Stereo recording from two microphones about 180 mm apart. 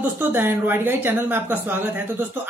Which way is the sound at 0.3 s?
10° right (ahead or behind).